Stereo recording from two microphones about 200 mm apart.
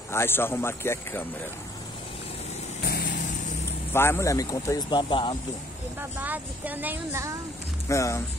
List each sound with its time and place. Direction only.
0.1 s speech: 10° left (ahead or behind)
3.9 s speech: 10° left (ahead or behind)
5.9 s speech: 10° right (ahead or behind)
7.9 s speech: 15° left (ahead or behind)